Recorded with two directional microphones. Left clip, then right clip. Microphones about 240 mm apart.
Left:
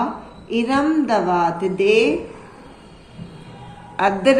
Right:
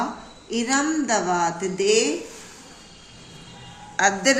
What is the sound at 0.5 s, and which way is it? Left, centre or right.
A woman's voice, centre.